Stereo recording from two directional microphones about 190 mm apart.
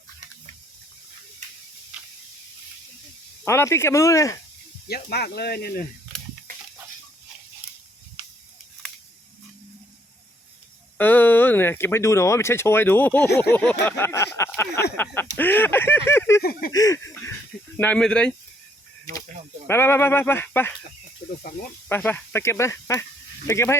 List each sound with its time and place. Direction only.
3.4 s speech: 15° left (ahead or behind)
4.9 s speech: 55° left (ahead or behind)
10.9 s speech: 10° left (ahead or behind)
16.4 s a sound: 50° left (ahead or behind)
16.7 s speech: 15° left (ahead or behind)
19.6 s speech: 10° left (ahead or behind)
21.8 s speech: 10° left (ahead or behind)